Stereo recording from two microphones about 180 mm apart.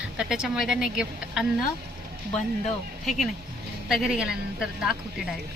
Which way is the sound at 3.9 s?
5° right (ahead or behind).